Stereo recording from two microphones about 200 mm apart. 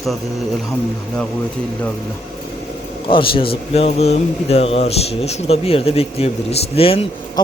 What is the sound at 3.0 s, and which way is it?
Speech, 25° left (ahead or behind).